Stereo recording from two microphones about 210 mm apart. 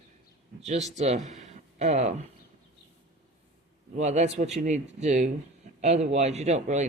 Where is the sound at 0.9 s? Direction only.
35° right (ahead or behind).